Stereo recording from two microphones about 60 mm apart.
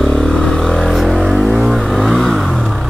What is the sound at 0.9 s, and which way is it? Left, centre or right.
Vehicle, centre.